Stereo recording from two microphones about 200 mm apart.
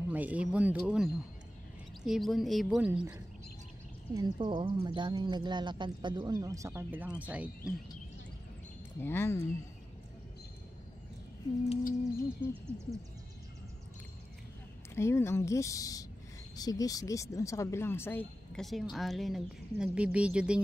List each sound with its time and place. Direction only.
0.1 s speech: 5° right (ahead or behind)
4.1 s speech: 20° right (ahead or behind)
9.0 s speech: 10° left (ahead or behind)
12.4 s speech: 15° right (ahead or behind)
15.0 s speech: 15° left (ahead or behind); by 20.6 s 5° right (ahead or behind)